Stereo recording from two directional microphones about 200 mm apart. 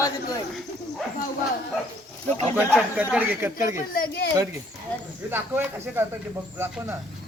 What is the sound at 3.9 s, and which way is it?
Speech, 45° left (ahead or behind).